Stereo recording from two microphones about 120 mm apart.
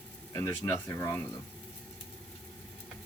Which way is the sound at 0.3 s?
25° left (ahead or behind).